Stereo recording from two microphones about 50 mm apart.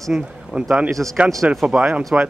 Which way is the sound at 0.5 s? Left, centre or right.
Centre.